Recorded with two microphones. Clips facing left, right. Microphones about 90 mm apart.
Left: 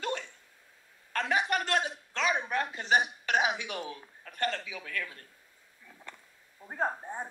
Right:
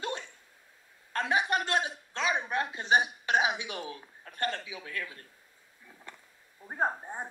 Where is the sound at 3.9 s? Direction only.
30° right (ahead or behind).